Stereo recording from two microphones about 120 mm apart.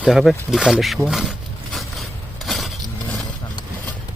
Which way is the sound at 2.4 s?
Centre (ahead or behind).